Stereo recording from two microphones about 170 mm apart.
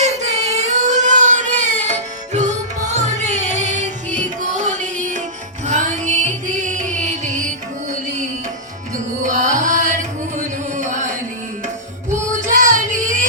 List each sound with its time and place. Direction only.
0.0 s a sound: 40° right (ahead or behind)
5.6 s music: 45° right (ahead or behind)
9.2 s music: 45° right (ahead or behind)
12.3 s child singing: 50° right (ahead or behind)